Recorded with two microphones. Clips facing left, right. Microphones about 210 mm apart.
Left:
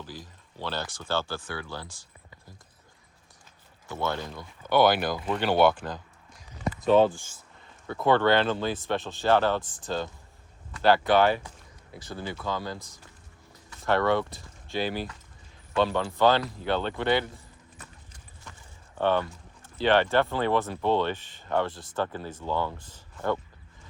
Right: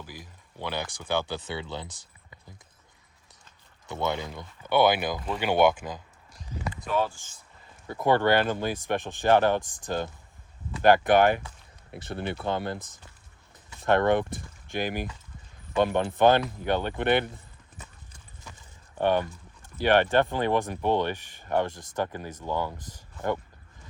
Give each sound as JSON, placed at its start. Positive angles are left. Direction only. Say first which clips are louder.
{"t": 0.0, "sound": "speech", "louder": "left 2 dB", "side_deg": -10}
{"t": 3.8, "sound": "speech", "louder": "right 1 dB", "side_deg": -20}
{"t": 6.8, "sound": "speech", "louder": "left 8 dB", "side_deg": 25}
{"t": 7.9, "sound": "speech", "louder": "even", "side_deg": -15}
{"t": 11.2, "sound": "speech", "louder": "right 1 dB", "side_deg": -50}
{"t": 12.1, "sound": "speech", "louder": "right 3 dB", "side_deg": -65}
{"t": 13.7, "sound": "speech", "louder": "right 2 dB", "side_deg": -20}
{"t": 18.9, "sound": "speech", "louder": "right 1 dB", "side_deg": -15}